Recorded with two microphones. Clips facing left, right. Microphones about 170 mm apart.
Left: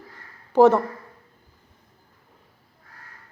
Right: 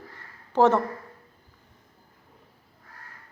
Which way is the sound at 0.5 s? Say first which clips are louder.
Left 5 dB; 10° left (ahead or behind).